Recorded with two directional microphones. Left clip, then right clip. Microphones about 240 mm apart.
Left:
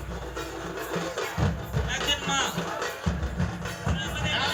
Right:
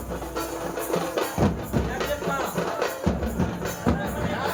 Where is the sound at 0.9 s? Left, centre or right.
Right.